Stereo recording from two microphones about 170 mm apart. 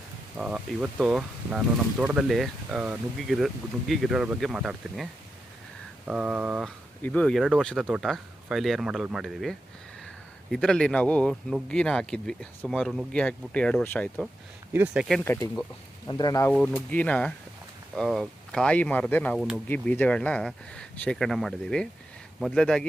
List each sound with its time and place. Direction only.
0.3 s speech: 5° right (ahead or behind)
6.1 s speech: 5° right (ahead or behind)
7.0 s speech: 5° left (ahead or behind)
14.7 s speech: 15° right (ahead or behind)
15.2 s speech: 15° left (ahead or behind)
16.5 s speech: 10° left (ahead or behind)